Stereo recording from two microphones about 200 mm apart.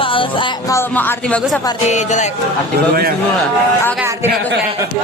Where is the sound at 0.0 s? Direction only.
25° left (ahead or behind).